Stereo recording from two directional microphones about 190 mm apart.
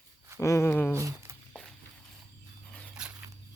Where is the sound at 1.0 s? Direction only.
15° right (ahead or behind).